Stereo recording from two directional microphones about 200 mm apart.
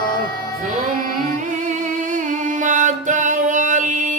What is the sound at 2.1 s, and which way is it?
Music, 40° right (ahead or behind).